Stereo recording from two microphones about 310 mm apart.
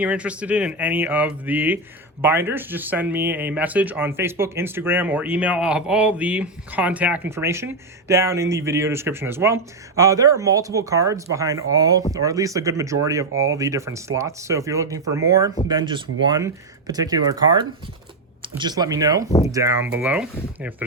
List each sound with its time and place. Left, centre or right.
0.0 s speech: centre